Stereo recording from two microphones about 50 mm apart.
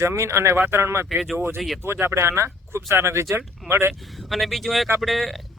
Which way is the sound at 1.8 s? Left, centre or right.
Right.